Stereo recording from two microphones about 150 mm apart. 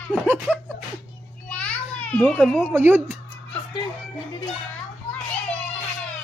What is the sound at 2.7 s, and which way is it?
Speech, 15° right (ahead or behind).